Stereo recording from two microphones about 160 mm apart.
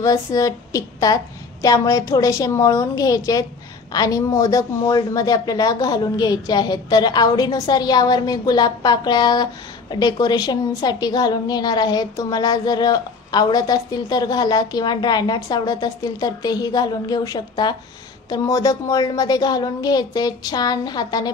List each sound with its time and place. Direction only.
0.0 s speech: 20° left (ahead or behind)